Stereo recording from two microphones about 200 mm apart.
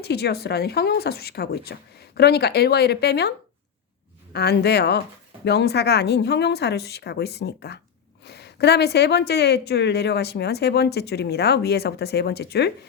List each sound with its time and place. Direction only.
0.0 s a woman's voice: 55° left (ahead or behind)